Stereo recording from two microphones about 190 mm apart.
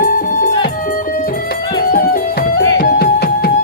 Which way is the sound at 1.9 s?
45° left (ahead or behind).